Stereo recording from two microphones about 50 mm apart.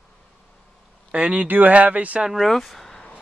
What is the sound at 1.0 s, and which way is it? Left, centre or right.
Speech, right.